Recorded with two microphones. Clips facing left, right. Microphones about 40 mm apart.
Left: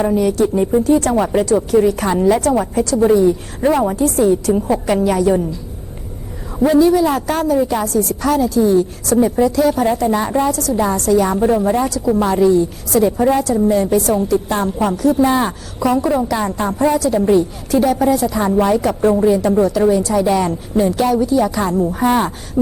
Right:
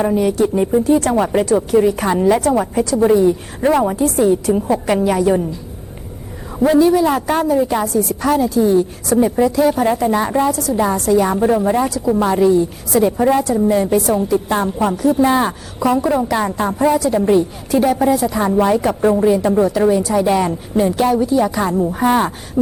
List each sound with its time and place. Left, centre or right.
0.0 s a woman's voice: centre
6.7 s a woman's voice: centre